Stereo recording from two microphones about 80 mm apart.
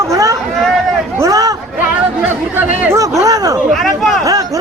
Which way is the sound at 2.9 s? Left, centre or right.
Right.